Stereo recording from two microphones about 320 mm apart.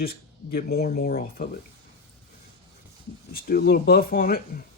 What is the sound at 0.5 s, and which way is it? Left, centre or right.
Speech, left.